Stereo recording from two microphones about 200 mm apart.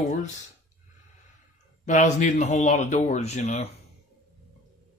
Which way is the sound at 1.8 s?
35° left (ahead or behind).